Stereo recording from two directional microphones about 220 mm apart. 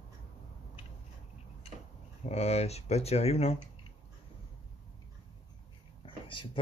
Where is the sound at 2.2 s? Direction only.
30° left (ahead or behind).